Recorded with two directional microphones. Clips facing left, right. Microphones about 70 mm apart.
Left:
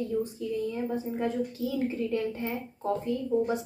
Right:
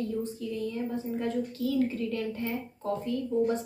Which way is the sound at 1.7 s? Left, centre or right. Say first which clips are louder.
Right 2 dB; left.